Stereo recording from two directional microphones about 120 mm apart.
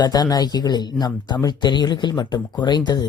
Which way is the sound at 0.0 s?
35° left (ahead or behind).